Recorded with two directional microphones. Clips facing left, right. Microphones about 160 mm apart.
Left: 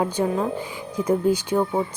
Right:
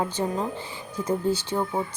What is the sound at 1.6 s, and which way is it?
Speech, 25° left (ahead or behind).